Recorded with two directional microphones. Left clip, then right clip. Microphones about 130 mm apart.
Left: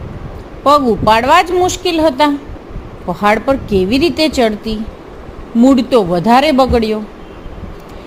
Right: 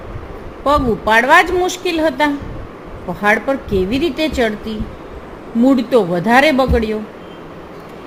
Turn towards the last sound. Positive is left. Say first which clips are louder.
# left 3 dB
turn(degrees=50)  # may be behind; listen again after turning